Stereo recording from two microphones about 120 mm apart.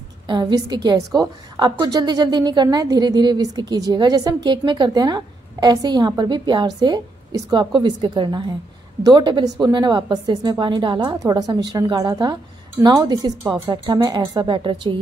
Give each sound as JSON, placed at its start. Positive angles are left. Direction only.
{"t": 0.3, "sound": "a woman's voice", "side_deg": -35}